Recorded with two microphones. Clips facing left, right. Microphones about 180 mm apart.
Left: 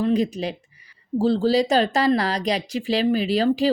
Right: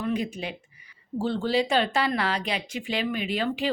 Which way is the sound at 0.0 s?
35° left (ahead or behind).